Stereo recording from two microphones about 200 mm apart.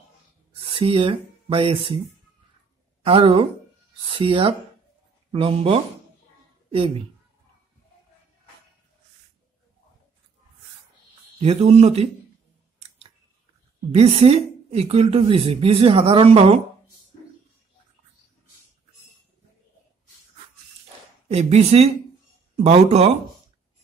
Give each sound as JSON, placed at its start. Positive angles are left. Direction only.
{"t": 0.7, "sound": "speech", "side_deg": -25}
{"t": 3.0, "sound": "a woman's voice", "side_deg": -25}
{"t": 11.3, "sound": "speech", "side_deg": -30}
{"t": 13.9, "sound": "a woman's voice", "side_deg": -30}
{"t": 21.3, "sound": "speech", "side_deg": -30}